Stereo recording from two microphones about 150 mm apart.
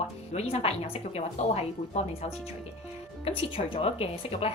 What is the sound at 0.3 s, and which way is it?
Speech, 45° left (ahead or behind).